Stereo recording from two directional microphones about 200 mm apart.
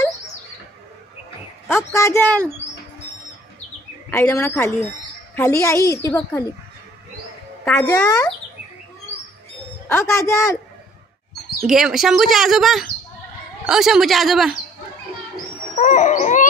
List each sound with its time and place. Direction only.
1.7 s a woman's voice: 15° left (ahead or behind)
4.1 s a woman's voice: 10° left (ahead or behind)
7.6 s a woman's voice: 15° left (ahead or behind)
9.8 s a woman's voice: 10° left (ahead or behind)
11.6 s speech: centre (ahead or behind)
15.7 s wild animals: 40° left (ahead or behind)